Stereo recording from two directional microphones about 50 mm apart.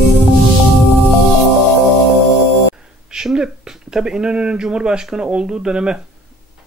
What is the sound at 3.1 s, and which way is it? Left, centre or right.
Speech, centre.